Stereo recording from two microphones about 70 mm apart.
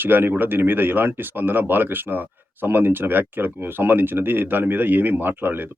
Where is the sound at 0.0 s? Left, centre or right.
Right.